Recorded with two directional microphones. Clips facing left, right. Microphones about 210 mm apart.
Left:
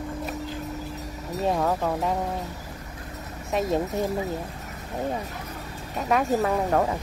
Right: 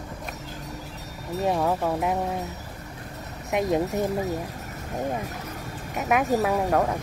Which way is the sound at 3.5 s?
15° right (ahead or behind).